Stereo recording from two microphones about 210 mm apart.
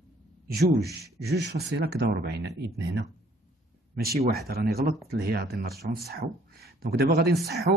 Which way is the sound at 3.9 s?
45° right (ahead or behind).